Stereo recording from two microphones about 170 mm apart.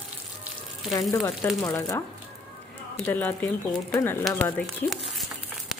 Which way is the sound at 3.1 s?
15° left (ahead or behind).